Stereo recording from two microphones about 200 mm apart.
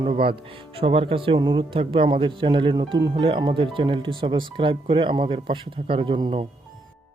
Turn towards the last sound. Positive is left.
turn(degrees=-25)  # may be behind; listen again after turning